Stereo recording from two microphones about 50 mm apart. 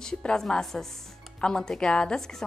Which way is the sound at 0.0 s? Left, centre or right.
Centre.